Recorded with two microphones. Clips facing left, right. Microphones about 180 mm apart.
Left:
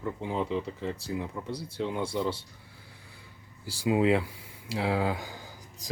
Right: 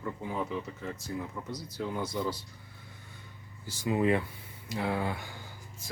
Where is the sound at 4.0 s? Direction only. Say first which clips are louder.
Left 1 dB; 90° left.